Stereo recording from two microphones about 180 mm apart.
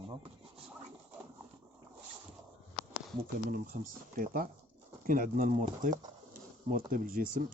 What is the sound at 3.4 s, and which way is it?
Speech, 55° right (ahead or behind).